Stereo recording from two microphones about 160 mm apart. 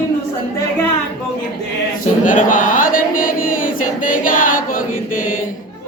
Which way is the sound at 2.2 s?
55° left (ahead or behind).